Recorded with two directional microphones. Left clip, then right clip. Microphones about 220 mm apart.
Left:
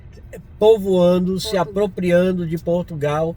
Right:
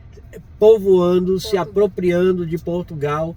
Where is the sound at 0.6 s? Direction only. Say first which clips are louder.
Right 2 dB; 25° left (ahead or behind).